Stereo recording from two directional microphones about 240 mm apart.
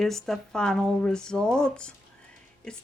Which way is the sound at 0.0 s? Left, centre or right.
Centre.